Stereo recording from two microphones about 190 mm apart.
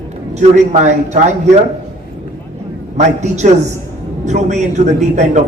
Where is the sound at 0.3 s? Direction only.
40° right (ahead or behind).